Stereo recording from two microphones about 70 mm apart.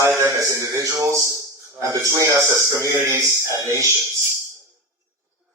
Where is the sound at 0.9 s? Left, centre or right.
Right.